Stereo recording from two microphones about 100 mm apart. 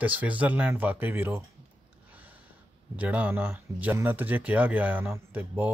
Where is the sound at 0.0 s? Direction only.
15° right (ahead or behind).